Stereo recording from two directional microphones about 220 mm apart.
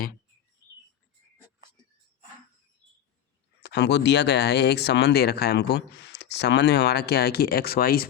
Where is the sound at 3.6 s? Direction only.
50° left (ahead or behind).